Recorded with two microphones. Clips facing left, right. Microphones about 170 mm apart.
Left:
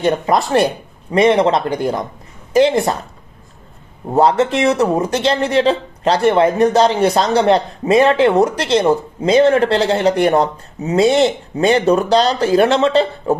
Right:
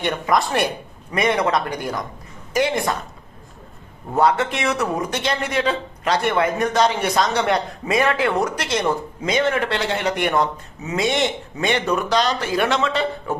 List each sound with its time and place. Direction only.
0.0 s speech: 30° left (ahead or behind)
4.1 s speech: 30° left (ahead or behind)